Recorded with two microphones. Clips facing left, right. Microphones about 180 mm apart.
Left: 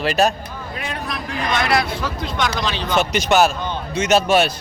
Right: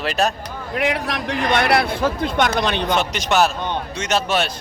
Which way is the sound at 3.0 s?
Centre (ahead or behind).